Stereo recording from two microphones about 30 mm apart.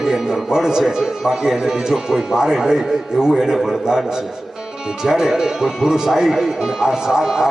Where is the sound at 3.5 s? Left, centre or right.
Centre.